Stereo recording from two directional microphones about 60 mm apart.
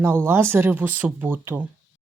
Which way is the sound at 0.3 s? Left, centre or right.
Right.